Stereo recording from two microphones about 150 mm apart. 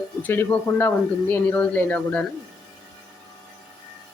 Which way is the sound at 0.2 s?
10° left (ahead or behind).